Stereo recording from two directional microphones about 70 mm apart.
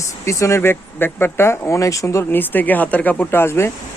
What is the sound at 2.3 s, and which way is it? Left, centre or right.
Speech, left.